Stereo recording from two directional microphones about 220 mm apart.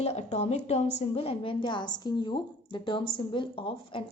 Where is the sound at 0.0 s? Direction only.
30° left (ahead or behind).